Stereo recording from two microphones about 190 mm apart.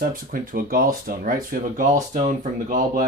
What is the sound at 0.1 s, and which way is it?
Speech, 50° right (ahead or behind).